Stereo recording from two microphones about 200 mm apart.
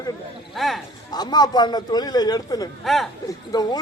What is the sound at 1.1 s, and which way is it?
A man's voice, 20° left (ahead or behind).